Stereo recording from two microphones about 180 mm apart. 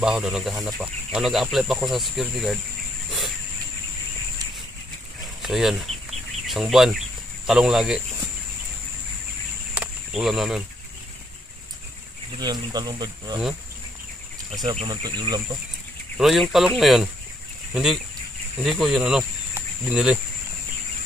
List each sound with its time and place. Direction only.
0.0 s speech: 5° right (ahead or behind)
5.4 s chicken: centre (ahead or behind)
7.4 s speech: centre (ahead or behind)
9.8 s a sound: centre (ahead or behind)
12.4 s speech: 20° right (ahead or behind)
14.6 s speech: 25° right (ahead or behind)
16.2 s speech: centre (ahead or behind)
18.6 s speech: centre (ahead or behind)